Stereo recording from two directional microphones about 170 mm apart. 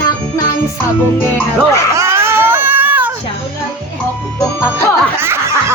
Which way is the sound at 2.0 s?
15° right (ahead or behind).